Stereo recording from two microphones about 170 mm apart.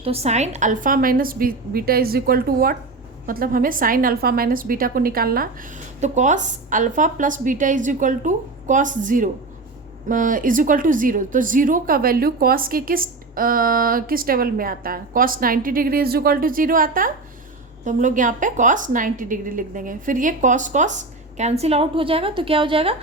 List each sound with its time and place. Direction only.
0.0 s speech: 35° right (ahead or behind); by 5.5 s 60° right (ahead or behind)
6.0 s a woman's voice: 45° right (ahead or behind)